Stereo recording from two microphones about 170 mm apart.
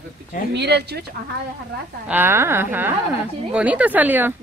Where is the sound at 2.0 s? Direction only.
10° right (ahead or behind).